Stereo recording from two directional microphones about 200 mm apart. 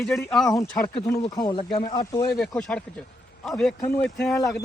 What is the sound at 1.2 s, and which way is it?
Speech, 25° left (ahead or behind).